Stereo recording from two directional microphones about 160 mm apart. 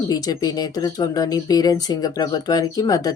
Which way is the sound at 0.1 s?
25° left (ahead or behind).